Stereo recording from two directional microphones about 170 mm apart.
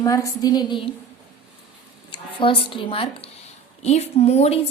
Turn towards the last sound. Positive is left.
turn(degrees=40)  # may be behind; listen again after turning